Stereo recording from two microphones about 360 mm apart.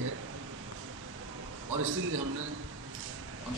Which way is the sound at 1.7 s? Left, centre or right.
Right.